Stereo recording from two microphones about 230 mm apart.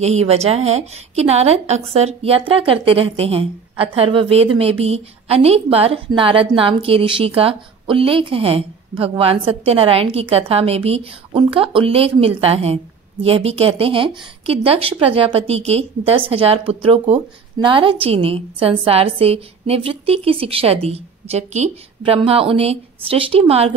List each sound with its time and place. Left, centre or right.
0.0 s a woman's voice: right